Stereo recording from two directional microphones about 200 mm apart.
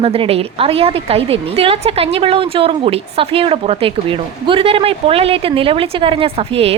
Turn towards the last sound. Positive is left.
turn(degrees=-30)  # may be behind; listen again after turning